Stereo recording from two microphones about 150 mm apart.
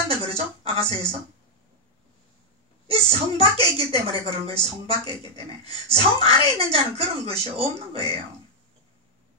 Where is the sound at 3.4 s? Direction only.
40° right (ahead or behind).